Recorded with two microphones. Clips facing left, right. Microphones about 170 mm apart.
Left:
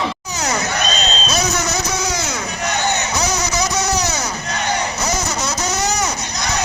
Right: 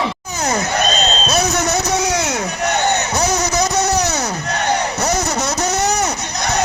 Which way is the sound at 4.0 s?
60° right (ahead or behind).